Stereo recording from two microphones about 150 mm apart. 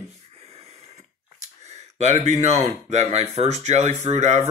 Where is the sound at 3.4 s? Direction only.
50° right (ahead or behind).